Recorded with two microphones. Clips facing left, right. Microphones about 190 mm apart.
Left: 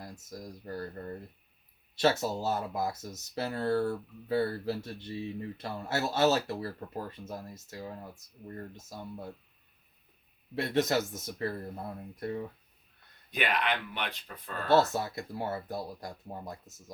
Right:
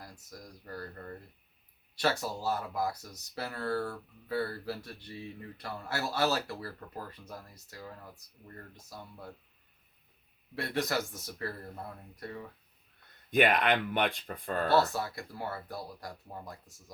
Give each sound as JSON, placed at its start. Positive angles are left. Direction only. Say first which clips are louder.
{"t": 0.0, "sound": "speech", "louder": "left 5 dB", "side_deg": 25}
{"t": 10.5, "sound": "speech", "louder": "left 4 dB", "side_deg": 20}
{"t": 13.3, "sound": "speech", "louder": "right 5 dB", "side_deg": -50}
{"t": 14.7, "sound": "speech", "louder": "left 4 dB", "side_deg": 20}